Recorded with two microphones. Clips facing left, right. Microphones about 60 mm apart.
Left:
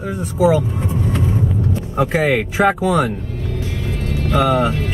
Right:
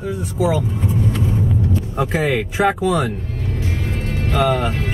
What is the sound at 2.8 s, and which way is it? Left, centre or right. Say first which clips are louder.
Speech: left 2 dB; left.